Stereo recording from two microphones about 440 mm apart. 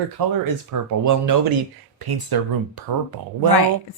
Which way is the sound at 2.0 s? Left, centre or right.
Right.